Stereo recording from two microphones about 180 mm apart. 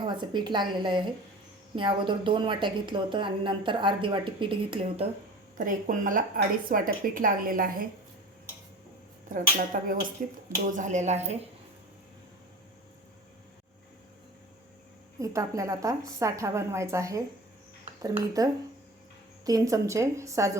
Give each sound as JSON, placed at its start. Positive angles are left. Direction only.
{"t": 0.0, "sound": "a woman's voice", "side_deg": -25}
{"t": 5.5, "sound": "a woman's voice", "side_deg": -45}
{"t": 9.3, "sound": "a woman's voice", "side_deg": -50}
{"t": 10.7, "sound": "speech", "side_deg": -45}
{"t": 15.2, "sound": "a woman's voice", "side_deg": -15}
{"t": 19.5, "sound": "a woman's voice", "side_deg": -20}